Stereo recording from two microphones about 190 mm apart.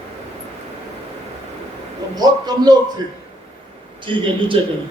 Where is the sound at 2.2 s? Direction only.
20° right (ahead or behind).